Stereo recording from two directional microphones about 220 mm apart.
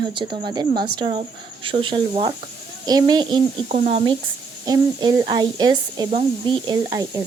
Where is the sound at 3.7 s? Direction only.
35° right (ahead or behind).